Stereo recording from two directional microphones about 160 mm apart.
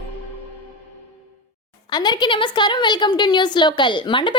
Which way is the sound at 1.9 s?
25° left (ahead or behind).